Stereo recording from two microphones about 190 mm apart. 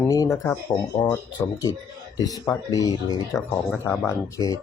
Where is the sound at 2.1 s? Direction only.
20° left (ahead or behind).